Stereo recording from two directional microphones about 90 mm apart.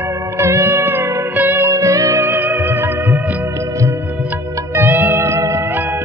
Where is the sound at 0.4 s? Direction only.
30° right (ahead or behind).